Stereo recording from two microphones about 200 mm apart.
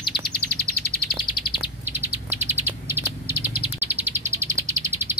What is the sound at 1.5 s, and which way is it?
Bird, 10° right (ahead or behind).